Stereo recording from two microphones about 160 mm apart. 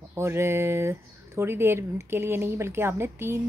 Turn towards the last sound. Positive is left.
turn(degrees=-15)  # may be behind; listen again after turning